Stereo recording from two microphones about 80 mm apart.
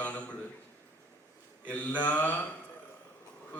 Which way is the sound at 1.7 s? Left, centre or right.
Centre.